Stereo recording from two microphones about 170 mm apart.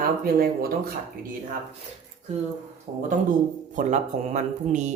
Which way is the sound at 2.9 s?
40° right (ahead or behind).